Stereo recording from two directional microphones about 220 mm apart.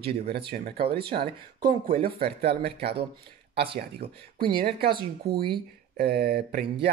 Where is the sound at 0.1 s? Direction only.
45° right (ahead or behind).